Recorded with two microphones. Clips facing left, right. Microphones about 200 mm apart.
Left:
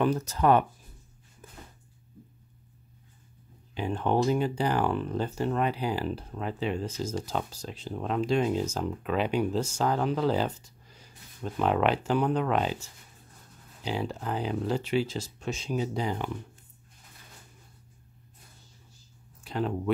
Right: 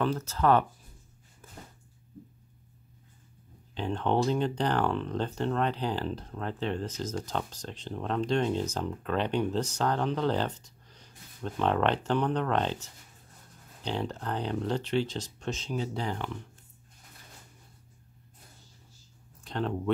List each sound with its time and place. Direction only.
0.0 s speech: 15° left (ahead or behind)
1.4 s a sound: 15° left (ahead or behind)
3.7 s speech: 10° left (ahead or behind)
19.4 s speech: 5° left (ahead or behind)